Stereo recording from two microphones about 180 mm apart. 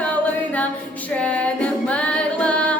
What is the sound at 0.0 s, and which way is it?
Singing, 10° left (ahead or behind).